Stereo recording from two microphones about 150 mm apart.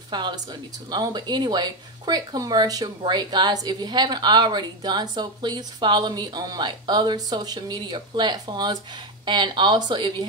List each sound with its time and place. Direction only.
0.1 s a woman's voice: 30° right (ahead or behind)